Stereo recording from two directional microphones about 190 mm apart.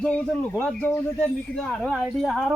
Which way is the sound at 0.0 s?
5° left (ahead or behind).